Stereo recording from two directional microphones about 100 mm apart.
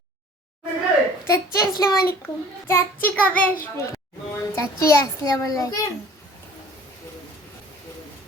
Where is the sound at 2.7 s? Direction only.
25° left (ahead or behind).